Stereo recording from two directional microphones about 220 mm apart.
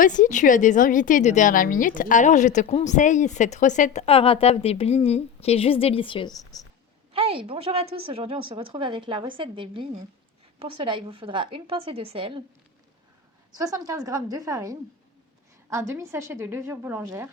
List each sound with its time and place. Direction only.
0.0 s a woman's voice: 35° left (ahead or behind); by 6.7 s 15° left (ahead or behind)
7.1 s a woman's voice: 25° right (ahead or behind)
13.6 s a woman's voice: 15° right (ahead or behind)